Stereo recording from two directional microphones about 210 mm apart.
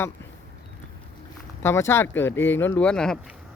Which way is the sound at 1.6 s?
10° left (ahead or behind).